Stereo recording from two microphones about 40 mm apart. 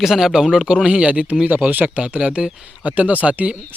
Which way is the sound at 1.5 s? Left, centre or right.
Right.